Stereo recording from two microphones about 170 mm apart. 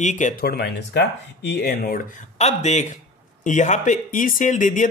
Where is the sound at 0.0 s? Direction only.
45° left (ahead or behind).